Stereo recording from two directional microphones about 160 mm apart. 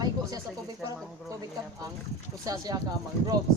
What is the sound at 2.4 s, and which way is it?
Speech, 25° right (ahead or behind).